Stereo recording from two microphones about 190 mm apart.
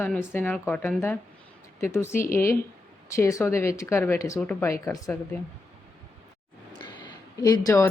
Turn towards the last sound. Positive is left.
turn(degrees=15)  # may be behind; listen again after turning